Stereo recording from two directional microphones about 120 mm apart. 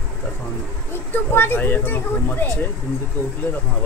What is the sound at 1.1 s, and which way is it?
A woman's voice, 20° left (ahead or behind).